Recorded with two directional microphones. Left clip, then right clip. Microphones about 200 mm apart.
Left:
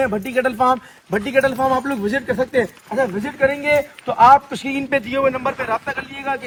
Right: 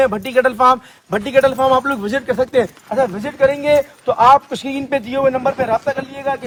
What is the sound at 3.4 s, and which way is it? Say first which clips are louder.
A man's voice: right 4 dB; 50° right (ahead or behind).